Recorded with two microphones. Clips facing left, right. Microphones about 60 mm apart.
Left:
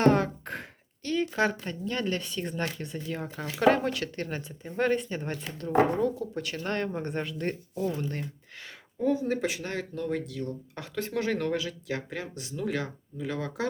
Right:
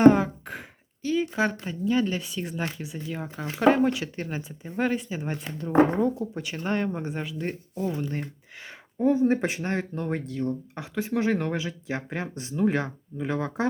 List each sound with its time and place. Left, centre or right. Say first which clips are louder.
0.0 s sigh: right 6 dB; centre
1.0 s speech: right 2 dB; centre
5.3 s speech: right 3 dB; centre
9.0 s speech: right 5 dB; right
10.8 s speech: right 2 dB; centre